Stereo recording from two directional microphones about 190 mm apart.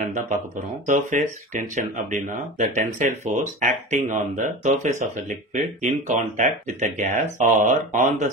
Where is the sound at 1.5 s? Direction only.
40° right (ahead or behind).